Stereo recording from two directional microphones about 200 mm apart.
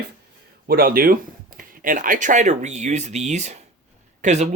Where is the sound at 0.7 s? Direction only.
45° right (ahead or behind).